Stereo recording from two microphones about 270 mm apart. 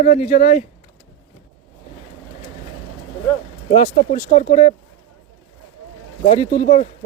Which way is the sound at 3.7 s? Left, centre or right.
Left.